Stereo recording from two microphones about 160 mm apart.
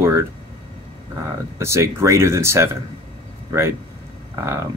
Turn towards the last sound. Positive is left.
turn(degrees=-15)  # may be behind; listen again after turning